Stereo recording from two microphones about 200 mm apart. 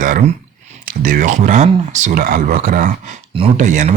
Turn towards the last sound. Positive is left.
turn(degrees=-40)  # may be behind; listen again after turning